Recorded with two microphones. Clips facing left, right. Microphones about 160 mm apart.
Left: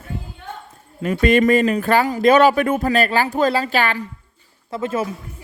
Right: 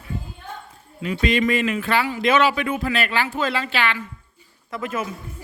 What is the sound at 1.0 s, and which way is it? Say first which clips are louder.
Speech: left 6 dB; 50° left (ahead or behind).